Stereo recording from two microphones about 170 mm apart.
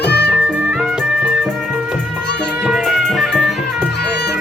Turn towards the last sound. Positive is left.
turn(degrees=0)  # may be behind; listen again after turning